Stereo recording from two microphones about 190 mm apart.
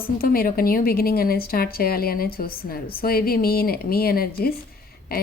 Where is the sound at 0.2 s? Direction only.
50° left (ahead or behind).